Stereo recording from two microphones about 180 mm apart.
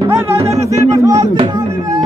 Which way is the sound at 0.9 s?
20° right (ahead or behind).